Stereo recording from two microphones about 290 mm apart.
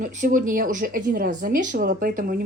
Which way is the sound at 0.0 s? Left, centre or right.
Right.